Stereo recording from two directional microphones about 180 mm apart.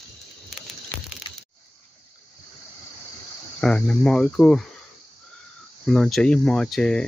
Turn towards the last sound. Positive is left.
turn(degrees=5)  # may be behind; listen again after turning